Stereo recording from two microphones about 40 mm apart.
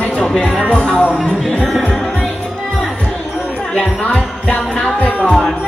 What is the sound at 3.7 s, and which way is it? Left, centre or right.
Speech, left.